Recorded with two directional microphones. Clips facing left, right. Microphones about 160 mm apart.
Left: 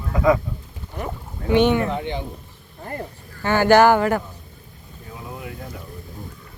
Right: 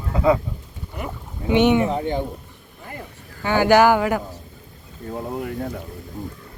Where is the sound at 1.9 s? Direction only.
40° right (ahead or behind).